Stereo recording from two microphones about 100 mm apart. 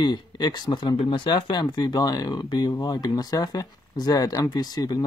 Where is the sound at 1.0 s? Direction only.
55° left (ahead or behind).